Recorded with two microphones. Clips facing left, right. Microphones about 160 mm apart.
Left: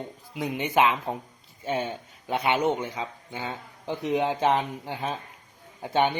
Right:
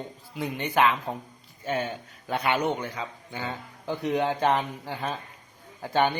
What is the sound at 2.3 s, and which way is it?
A man's voice, 20° left (ahead or behind).